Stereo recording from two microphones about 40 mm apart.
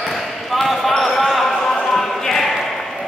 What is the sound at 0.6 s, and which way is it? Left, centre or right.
Basketball bounce, centre.